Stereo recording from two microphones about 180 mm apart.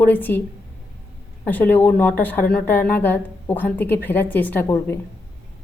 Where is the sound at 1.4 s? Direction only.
10° left (ahead or behind).